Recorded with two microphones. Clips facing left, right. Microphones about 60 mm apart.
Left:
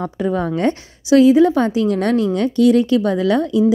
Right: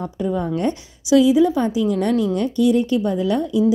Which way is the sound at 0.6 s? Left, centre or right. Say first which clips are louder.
Left 3 dB; left.